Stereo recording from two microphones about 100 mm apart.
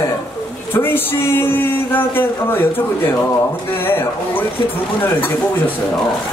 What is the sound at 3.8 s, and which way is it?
Speech, 20° left (ahead or behind).